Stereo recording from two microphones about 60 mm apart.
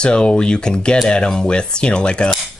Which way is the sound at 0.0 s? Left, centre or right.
Centre.